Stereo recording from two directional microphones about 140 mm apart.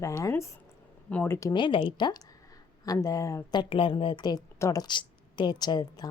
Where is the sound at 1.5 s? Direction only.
35° left (ahead or behind).